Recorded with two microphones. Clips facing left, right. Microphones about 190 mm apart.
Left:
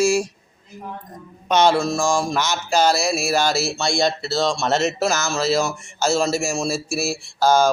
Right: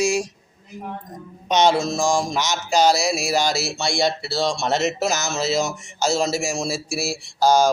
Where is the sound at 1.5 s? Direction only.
20° right (ahead or behind).